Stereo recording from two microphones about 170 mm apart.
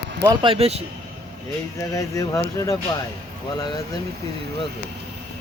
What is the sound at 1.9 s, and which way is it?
Speech, 20° left (ahead or behind).